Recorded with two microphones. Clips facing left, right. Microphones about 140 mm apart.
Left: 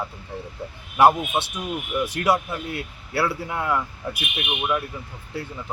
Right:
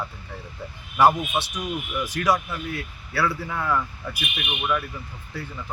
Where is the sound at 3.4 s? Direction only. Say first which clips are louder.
Left 1 dB; 20° left (ahead or behind).